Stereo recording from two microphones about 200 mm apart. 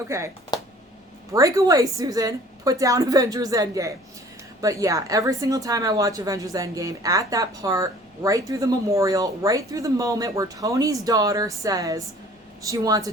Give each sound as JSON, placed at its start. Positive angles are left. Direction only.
{"t": 0.1, "sound": "a woman's voice", "side_deg": -15}
{"t": 0.5, "sound": "a sound", "side_deg": 20}
{"t": 1.3, "sound": "a woman's voice", "side_deg": -15}